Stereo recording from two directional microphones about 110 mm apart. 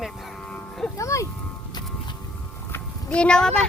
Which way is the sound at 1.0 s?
30° left (ahead or behind).